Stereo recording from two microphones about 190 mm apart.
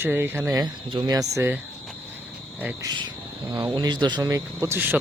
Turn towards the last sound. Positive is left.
turn(degrees=-10)  # may be behind; listen again after turning